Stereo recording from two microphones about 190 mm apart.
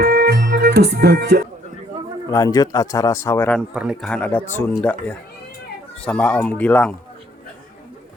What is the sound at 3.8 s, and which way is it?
Speech, centre (ahead or behind).